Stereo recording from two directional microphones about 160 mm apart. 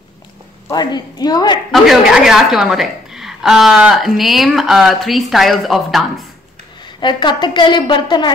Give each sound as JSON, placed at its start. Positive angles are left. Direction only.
{"t": 0.7, "sound": "a woman's voice", "side_deg": 25}
{"t": 1.7, "sound": "a woman's voice", "side_deg": 0}
{"t": 7.0, "sound": "a woman's voice", "side_deg": 30}